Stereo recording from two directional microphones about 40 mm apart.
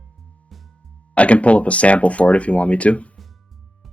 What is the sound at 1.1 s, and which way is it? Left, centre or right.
Speech, left.